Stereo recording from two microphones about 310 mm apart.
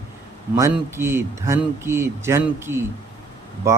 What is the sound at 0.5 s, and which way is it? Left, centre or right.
Speech, centre.